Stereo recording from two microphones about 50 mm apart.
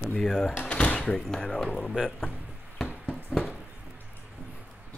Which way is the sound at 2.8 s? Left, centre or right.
Right.